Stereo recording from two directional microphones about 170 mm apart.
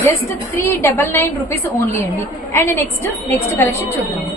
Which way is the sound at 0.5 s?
15° left (ahead or behind).